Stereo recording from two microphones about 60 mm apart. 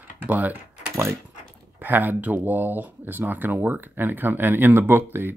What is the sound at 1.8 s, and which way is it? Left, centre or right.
Speech, right.